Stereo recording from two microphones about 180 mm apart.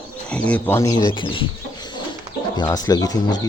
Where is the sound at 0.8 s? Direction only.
20° left (ahead or behind).